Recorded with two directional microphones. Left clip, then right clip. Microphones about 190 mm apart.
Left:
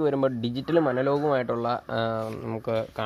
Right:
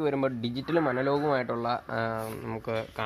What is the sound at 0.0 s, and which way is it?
Speech, 40° left (ahead or behind).